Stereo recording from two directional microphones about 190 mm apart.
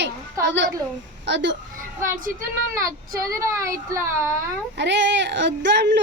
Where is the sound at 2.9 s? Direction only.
15° right (ahead or behind).